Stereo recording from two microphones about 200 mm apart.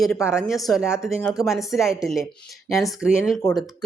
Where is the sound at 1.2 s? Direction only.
15° left (ahead or behind).